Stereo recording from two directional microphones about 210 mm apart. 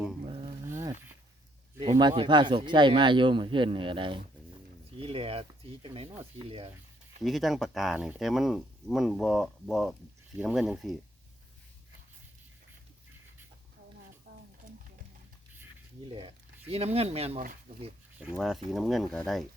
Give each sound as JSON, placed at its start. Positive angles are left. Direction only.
{"t": 0.3, "sound": "a sound", "side_deg": -25}
{"t": 1.8, "sound": "speech", "side_deg": -25}
{"t": 7.2, "sound": "speech", "side_deg": 0}
{"t": 16.6, "sound": "speech", "side_deg": -30}
{"t": 18.2, "sound": "speech", "side_deg": 0}